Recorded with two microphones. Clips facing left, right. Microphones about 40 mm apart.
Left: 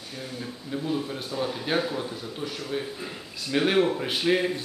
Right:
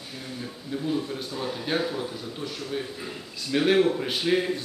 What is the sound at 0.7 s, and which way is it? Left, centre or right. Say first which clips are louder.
Speech: right 1 dB; centre.